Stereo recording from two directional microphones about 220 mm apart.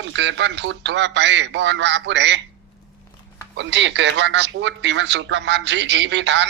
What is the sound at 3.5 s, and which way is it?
Speech, 55° right (ahead or behind).